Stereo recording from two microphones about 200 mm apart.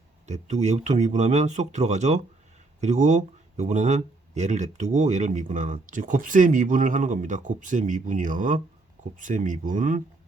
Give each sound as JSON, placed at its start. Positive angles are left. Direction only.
{"t": 0.3, "sound": "speech", "side_deg": -35}